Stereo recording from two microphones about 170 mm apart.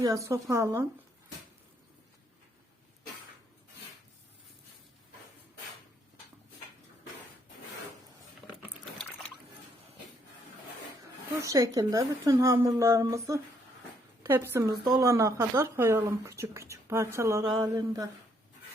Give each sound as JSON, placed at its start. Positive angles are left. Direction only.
{"t": 0.0, "sound": "speech", "side_deg": -20}
{"t": 8.4, "sound": "a sound", "side_deg": 0}
{"t": 8.8, "sound": "liquid", "side_deg": 0}
{"t": 11.4, "sound": "speech", "side_deg": -20}